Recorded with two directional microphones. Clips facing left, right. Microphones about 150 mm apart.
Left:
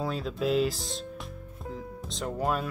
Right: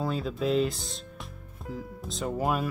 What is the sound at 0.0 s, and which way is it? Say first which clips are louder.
Speech: right 1 dB; centre (ahead or behind).